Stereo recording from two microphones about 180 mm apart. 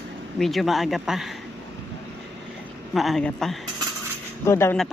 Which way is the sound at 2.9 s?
Centre (ahead or behind).